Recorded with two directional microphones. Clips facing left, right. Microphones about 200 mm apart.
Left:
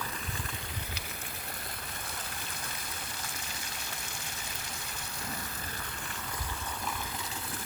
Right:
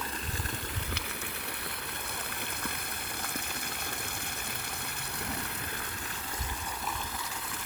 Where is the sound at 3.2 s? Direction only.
60° right (ahead or behind).